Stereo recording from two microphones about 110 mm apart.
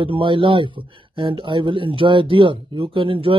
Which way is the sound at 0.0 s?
50° right (ahead or behind).